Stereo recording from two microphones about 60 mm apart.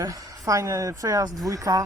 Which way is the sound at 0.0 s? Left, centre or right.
Right.